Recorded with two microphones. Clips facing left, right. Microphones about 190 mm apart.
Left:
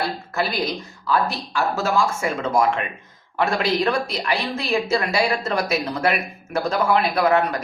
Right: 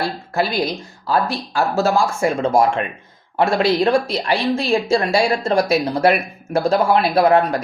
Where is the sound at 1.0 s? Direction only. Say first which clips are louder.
Right 2 dB; 35° right (ahead or behind).